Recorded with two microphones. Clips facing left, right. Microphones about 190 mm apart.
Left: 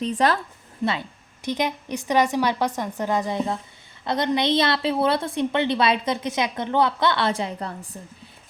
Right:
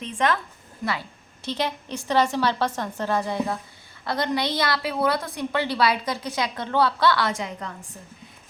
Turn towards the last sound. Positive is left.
turn(degrees=30)  # may be behind; listen again after turning